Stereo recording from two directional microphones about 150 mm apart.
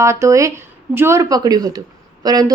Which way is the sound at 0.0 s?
20° right (ahead or behind).